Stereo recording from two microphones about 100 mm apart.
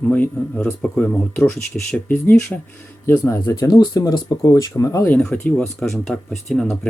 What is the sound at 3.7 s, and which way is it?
Speech, 40° left (ahead or behind).